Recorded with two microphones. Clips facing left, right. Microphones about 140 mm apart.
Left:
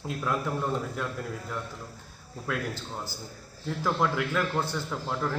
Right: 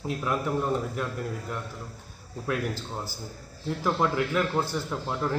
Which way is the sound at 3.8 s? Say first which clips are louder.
Right 2 dB; 10° right (ahead or behind).